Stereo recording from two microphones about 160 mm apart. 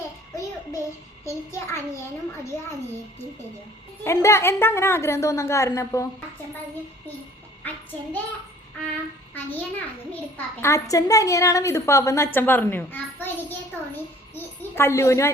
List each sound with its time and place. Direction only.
1.2 s a woman's voice: 15° left (ahead or behind)
4.0 s a woman's voice: 15° left (ahead or behind)
7.6 s child singing: 10° left (ahead or behind)
10.6 s a woman's voice: 20° left (ahead or behind)